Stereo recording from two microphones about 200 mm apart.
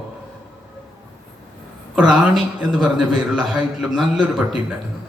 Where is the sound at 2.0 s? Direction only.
Centre (ahead or behind).